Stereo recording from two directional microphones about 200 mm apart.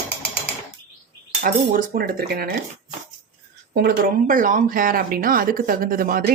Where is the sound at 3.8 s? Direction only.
45° right (ahead or behind).